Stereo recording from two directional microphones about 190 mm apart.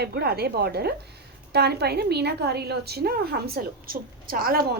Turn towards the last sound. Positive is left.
turn(degrees=-55)  # may be behind; listen again after turning